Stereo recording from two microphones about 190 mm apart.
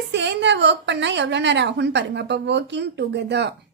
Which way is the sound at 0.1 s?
65° right (ahead or behind).